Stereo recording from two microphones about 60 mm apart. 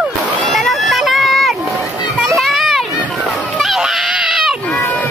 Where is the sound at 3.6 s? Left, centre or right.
Centre.